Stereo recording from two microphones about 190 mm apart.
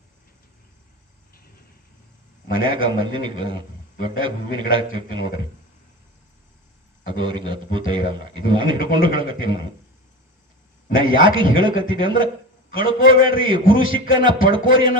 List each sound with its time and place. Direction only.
2.6 s a man's voice: 25° right (ahead or behind)
7.1 s a man's voice: 25° right (ahead or behind)
10.9 s a man's voice: 25° right (ahead or behind)